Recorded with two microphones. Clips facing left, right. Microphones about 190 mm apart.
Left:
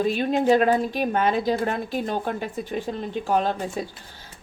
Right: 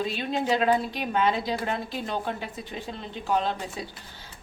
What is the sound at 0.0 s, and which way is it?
A woman's voice, 50° left (ahead or behind).